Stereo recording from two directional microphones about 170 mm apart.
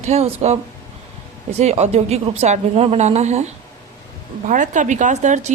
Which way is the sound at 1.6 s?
40° right (ahead or behind).